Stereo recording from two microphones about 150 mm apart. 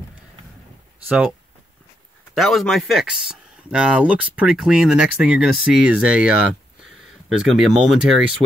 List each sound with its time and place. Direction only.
1.0 s speech: 5° right (ahead or behind)
2.3 s speech: centre (ahead or behind)
8.4 s speech: 35° right (ahead or behind)